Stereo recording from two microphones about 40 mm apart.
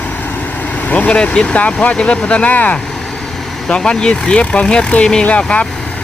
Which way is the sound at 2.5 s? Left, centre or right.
Left.